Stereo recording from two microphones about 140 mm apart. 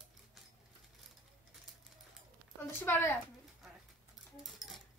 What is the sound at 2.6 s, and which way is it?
Speech, 15° left (ahead or behind).